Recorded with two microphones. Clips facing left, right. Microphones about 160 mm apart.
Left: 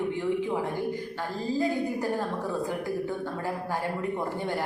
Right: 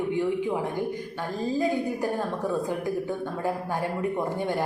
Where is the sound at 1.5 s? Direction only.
20° right (ahead or behind).